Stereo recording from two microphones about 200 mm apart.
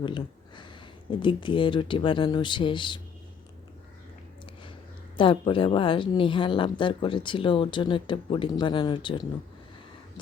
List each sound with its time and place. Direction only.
0.0 s speech: 25° left (ahead or behind)
5.1 s a woman's voice: 25° left (ahead or behind)